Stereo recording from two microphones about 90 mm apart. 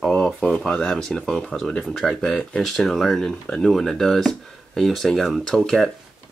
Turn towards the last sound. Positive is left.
turn(degrees=5)  # may be behind; listen again after turning